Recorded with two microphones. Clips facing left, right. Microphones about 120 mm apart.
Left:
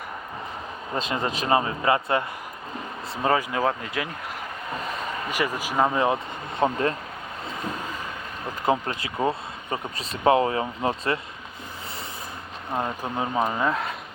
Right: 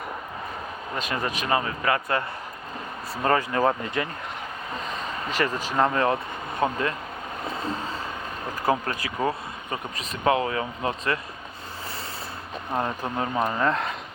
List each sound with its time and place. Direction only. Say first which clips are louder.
0.9 s speech: left 2 dB; 25° left (ahead or behind)
3.2 s speech: right 1 dB; 10° left (ahead or behind)
5.3 s speech: right 1 dB; 10° left (ahead or behind)
6.6 s speech: left 2 dB; 30° left (ahead or behind)
8.6 s speech: left 1 dB; 20° left (ahead or behind)
12.8 s speech: left 1 dB; 15° left (ahead or behind)